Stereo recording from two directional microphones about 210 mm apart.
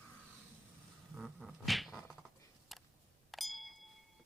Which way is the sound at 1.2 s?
Centre (ahead or behind).